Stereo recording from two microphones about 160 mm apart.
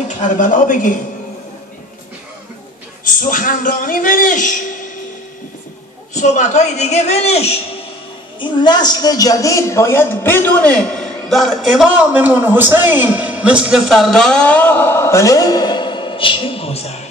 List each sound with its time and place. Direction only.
0.2 s a child's voice: 55° left (ahead or behind)
3.0 s a man's voice: 55° left (ahead or behind)
6.1 s a child's voice: 45° left (ahead or behind)
8.4 s a woman's voice: 30° left (ahead or behind)